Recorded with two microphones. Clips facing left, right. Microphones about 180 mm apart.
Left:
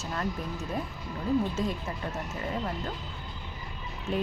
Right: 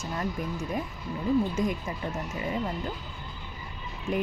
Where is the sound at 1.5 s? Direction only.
15° right (ahead or behind).